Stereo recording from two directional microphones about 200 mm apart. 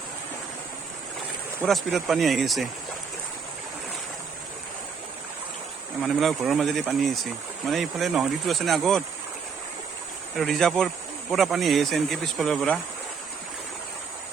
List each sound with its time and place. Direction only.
1.6 s speech: centre (ahead or behind)
6.0 s speech: centre (ahead or behind)
10.3 s speech: centre (ahead or behind)